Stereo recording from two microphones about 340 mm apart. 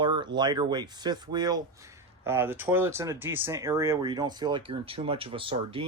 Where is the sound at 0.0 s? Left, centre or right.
Centre.